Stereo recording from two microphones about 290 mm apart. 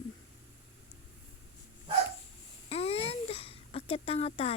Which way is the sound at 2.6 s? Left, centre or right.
Left.